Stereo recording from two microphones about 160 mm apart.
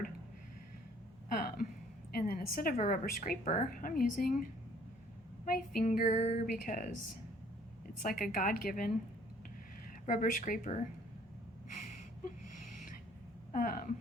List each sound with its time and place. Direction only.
1.3 s a sound: 60° left (ahead or behind)
2.1 s a woman's voice: 65° left (ahead or behind)
5.5 s a woman's voice: 60° left (ahead or behind)
8.0 s a woman's voice: 60° left (ahead or behind)
10.1 s a woman's voice: 60° left (ahead or behind)
11.7 s a sound: 50° left (ahead or behind)
13.5 s a woman's voice: 60° left (ahead or behind)